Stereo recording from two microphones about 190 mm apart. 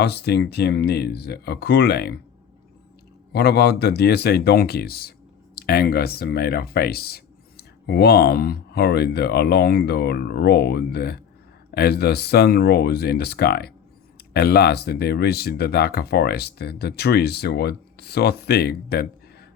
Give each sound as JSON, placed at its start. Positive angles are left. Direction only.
{"t": 0.0, "sound": "speech", "side_deg": 60}
{"t": 3.3, "sound": "speech", "side_deg": 60}